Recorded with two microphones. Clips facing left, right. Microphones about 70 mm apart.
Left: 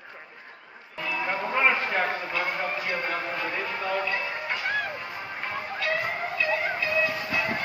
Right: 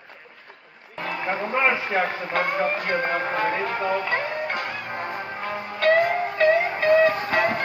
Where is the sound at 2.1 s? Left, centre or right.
Right.